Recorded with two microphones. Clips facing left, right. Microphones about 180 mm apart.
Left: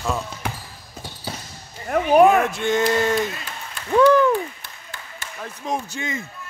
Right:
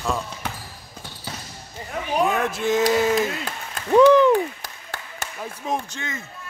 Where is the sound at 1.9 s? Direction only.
60° left (ahead or behind).